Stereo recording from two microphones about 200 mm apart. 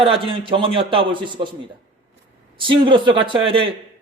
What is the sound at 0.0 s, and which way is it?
A man's voice, 25° right (ahead or behind).